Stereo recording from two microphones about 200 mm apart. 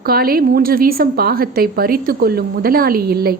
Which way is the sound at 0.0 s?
50° right (ahead or behind).